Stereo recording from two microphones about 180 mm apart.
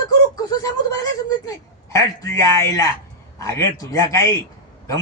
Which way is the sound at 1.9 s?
15° left (ahead or behind).